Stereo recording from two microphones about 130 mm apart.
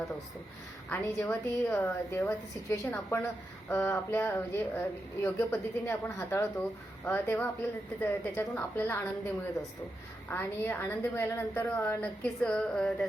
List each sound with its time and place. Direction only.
0.9 s a woman's voice: 15° left (ahead or behind)